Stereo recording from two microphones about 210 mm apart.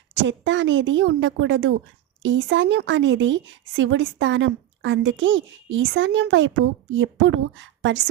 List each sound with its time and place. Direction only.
0.1 s speech: 60° right (ahead or behind)